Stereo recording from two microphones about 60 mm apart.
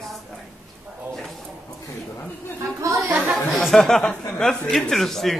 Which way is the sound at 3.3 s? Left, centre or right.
Centre.